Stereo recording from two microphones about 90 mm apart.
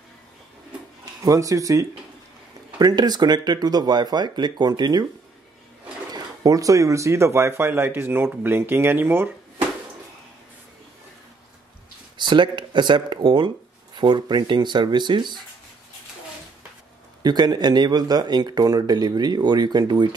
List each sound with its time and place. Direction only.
1.2 s speech: 40° right (ahead or behind)
2.8 s speech: 50° right (ahead or behind)
6.1 s speech: 40° right (ahead or behind); by 9.7 s 25° right (ahead or behind)
12.2 s speech: 60° right (ahead or behind)
17.2 s speech: 50° right (ahead or behind)